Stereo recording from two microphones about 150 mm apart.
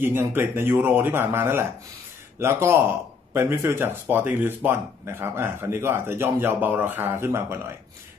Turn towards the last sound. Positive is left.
turn(degrees=-15)  # may be behind; listen again after turning